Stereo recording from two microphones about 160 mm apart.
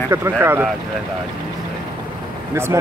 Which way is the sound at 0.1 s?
15° right (ahead or behind).